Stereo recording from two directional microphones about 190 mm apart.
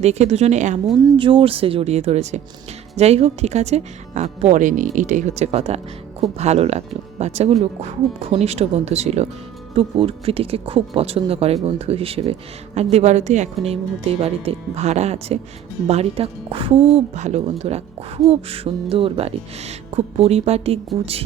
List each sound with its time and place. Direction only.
0.0 s speech: 35° right (ahead or behind)
1.2 s speech: 25° right (ahead or behind)